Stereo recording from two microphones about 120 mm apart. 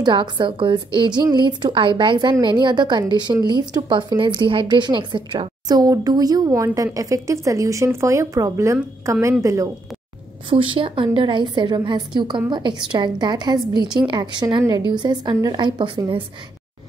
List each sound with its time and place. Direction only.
0.0 s a woman's voice: 40° right (ahead or behind)
10.5 s speech: 45° right (ahead or behind)